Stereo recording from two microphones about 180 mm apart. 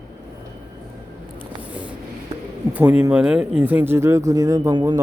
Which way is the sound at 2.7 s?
10° right (ahead or behind).